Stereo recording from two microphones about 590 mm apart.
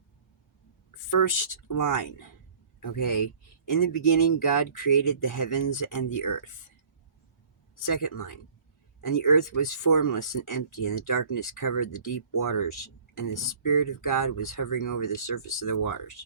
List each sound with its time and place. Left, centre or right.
0.9 s speech: left
7.9 s speech: left